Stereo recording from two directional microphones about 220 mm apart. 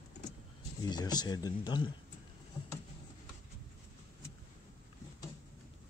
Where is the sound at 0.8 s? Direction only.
20° left (ahead or behind).